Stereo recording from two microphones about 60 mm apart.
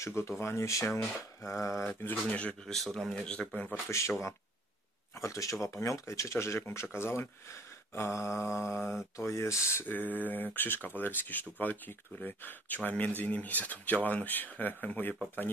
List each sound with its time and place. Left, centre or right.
0.0 s speech: left
0.7 s speech: left
1.4 s speech: left
2.0 s speech: left
2.6 s speech: centre
3.3 s speech: centre
3.9 s speech: left
5.2 s speech: left
9.8 s speech: left